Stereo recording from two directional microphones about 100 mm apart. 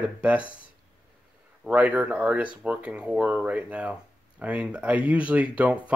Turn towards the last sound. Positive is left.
turn(degrees=-15)  # may be behind; listen again after turning